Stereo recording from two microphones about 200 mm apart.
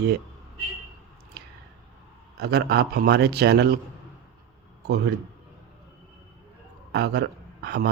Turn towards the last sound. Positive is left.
turn(degrees=-55)  # may be behind; listen again after turning